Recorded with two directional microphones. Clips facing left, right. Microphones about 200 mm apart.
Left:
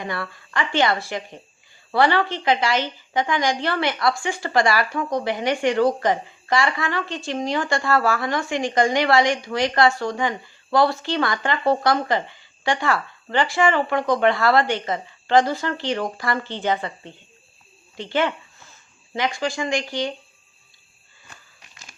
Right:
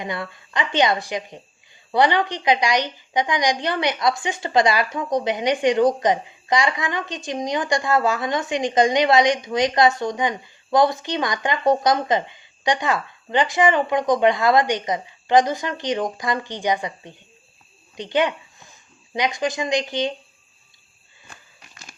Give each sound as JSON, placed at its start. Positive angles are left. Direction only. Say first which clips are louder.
{"t": 0.0, "sound": "a woman's voice", "louder": "right 1 dB", "side_deg": -20}